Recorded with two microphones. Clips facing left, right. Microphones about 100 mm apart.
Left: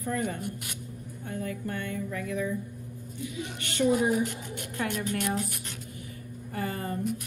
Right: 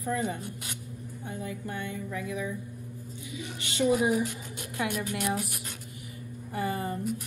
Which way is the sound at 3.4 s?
55° left (ahead or behind).